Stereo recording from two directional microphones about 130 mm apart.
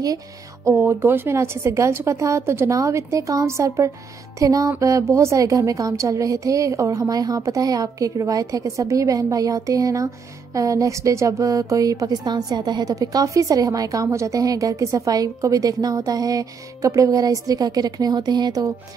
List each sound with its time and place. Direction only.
0.7 s a woman's voice: 20° right (ahead or behind)